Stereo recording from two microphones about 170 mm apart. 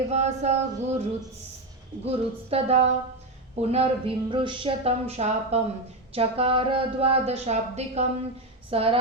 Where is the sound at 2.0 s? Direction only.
35° right (ahead or behind).